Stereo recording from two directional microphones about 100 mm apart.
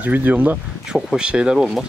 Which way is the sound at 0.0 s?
15° right (ahead or behind).